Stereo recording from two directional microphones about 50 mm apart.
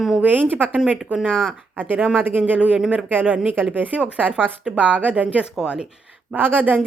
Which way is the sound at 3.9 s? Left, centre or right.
Right.